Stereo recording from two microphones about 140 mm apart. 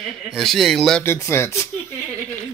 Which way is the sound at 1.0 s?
15° left (ahead or behind).